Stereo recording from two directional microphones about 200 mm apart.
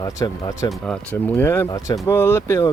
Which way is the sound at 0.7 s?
5° left (ahead or behind).